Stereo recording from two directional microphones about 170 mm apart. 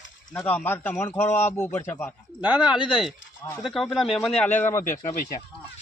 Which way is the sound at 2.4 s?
5° right (ahead or behind).